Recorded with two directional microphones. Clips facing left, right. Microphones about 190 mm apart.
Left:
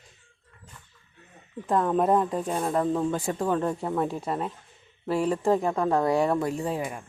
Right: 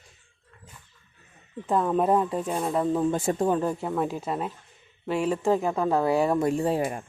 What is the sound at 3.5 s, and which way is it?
Speech, 5° right (ahead or behind).